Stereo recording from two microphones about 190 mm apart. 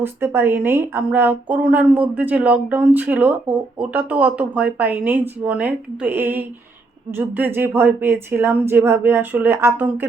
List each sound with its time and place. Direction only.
0.0 s speech: 10° right (ahead or behind)